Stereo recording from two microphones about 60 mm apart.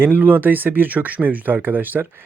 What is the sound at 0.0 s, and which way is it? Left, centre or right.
Speech, right.